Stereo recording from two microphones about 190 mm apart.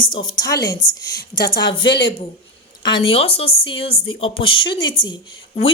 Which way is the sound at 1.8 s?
70° left (ahead or behind).